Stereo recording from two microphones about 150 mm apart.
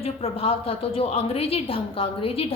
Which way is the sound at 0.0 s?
40° left (ahead or behind).